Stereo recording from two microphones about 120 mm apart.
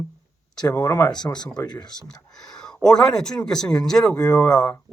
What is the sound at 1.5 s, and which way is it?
Speech, 35° left (ahead or behind).